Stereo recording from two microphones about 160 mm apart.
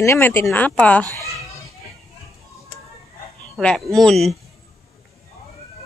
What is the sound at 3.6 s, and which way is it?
Speech, 5° left (ahead or behind).